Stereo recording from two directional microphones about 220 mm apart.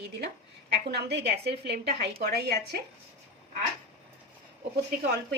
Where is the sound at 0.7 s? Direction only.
50° right (ahead or behind).